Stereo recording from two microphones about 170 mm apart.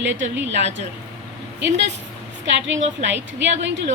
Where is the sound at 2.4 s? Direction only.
90° right.